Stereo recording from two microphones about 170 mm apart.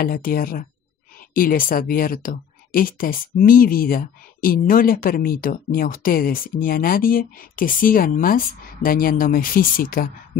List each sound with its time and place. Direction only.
0.0 s speech: 60° left (ahead or behind)